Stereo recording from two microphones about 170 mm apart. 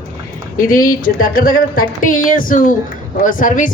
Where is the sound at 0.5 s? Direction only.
55° left (ahead or behind).